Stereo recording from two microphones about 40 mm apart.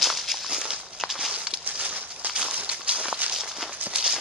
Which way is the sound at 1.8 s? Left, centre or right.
Right.